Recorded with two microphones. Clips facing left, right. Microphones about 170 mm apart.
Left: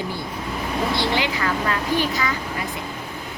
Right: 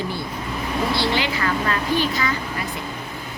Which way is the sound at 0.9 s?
20° left (ahead or behind).